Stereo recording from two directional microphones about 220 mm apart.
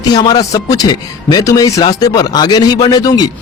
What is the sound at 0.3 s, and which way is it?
Speech, 15° left (ahead or behind).